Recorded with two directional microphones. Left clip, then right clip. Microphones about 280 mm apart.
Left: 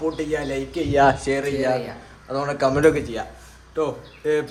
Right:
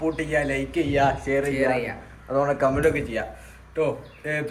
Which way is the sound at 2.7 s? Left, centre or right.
Left.